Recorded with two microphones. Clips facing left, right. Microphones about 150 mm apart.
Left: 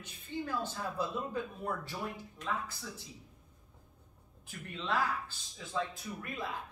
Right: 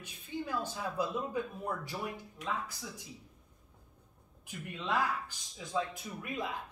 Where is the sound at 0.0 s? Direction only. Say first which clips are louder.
Even; 10° right (ahead or behind).